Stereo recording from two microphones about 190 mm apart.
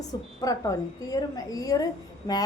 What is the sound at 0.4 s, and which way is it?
A woman's voice, 20° left (ahead or behind).